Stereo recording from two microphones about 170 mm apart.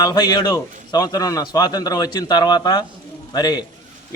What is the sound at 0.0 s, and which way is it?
A man's voice, 25° left (ahead or behind).